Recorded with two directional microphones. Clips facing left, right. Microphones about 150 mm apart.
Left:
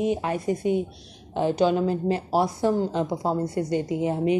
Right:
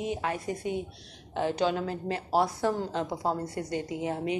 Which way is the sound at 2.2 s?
15° left (ahead or behind).